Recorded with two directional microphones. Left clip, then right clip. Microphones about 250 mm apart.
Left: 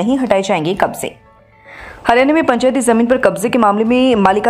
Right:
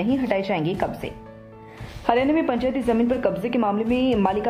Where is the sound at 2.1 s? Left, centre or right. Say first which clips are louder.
Left 9 dB; left.